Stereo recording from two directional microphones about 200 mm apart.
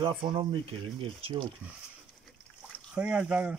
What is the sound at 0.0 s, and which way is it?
Speech, 25° right (ahead or behind).